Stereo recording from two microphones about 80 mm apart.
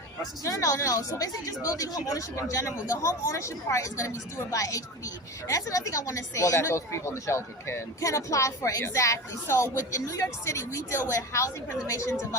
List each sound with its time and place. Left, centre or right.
0.4 s a woman's voice: left